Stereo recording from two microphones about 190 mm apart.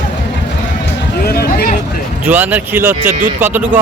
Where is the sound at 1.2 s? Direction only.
55° left (ahead or behind).